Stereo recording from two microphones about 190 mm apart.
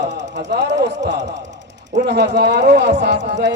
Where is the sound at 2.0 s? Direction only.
65° right (ahead or behind).